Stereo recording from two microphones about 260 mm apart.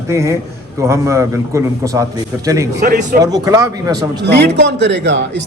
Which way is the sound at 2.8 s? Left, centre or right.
Right.